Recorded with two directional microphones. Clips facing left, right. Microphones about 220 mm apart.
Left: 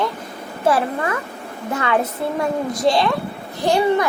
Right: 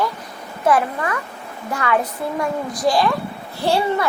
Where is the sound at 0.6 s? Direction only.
30° left (ahead or behind).